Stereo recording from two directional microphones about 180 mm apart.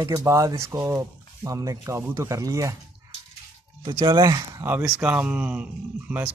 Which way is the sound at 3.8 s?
25° right (ahead or behind).